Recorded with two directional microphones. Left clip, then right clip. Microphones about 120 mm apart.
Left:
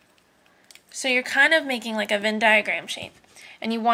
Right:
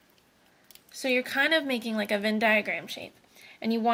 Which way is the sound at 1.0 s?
90° right.